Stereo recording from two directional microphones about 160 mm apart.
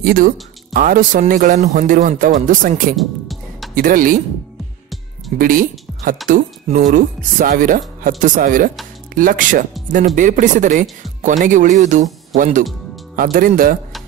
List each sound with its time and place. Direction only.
0.0 s speech: 60° right (ahead or behind)
3.0 s music: centre (ahead or behind)
3.7 s speech: 60° right (ahead or behind)
5.4 s speech: 60° right (ahead or behind)
13.1 s speech: 65° right (ahead or behind)